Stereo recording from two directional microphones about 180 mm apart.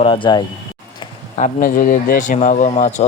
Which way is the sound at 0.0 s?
30° left (ahead or behind).